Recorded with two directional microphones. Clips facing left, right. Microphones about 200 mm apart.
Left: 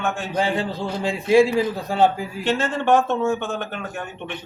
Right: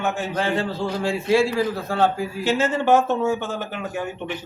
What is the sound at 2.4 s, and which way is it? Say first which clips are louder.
Speech: right 1 dB; 5° right (ahead or behind).